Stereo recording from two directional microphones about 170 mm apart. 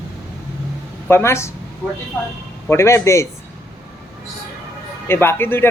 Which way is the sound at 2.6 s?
15° left (ahead or behind).